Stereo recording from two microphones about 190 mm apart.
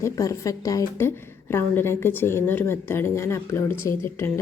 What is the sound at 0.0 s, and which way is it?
A woman's voice, 15° left (ahead or behind).